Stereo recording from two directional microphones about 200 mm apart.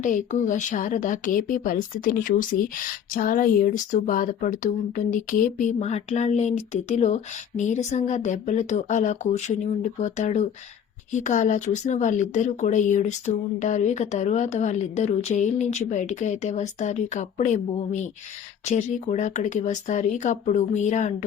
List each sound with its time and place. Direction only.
0.0 s speech: 40° left (ahead or behind)